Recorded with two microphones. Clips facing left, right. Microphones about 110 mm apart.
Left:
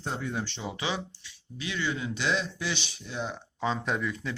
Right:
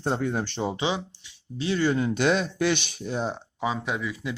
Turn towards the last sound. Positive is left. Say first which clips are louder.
# right 1 dB
turn(degrees=-10)  # may be behind; listen again after turning